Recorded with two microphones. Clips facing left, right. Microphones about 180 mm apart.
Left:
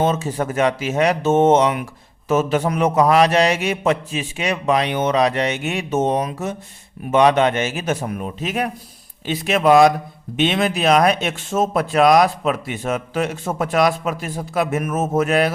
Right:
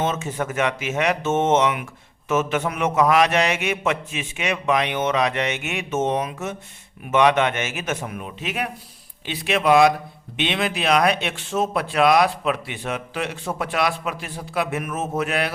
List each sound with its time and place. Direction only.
0.0 s a man's voice: 35° left (ahead or behind)